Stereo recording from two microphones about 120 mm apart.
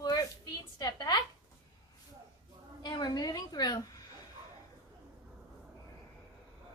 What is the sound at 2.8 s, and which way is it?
A woman's voice, 35° left (ahead or behind).